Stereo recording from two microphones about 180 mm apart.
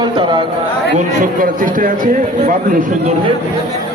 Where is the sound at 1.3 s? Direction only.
50° right (ahead or behind).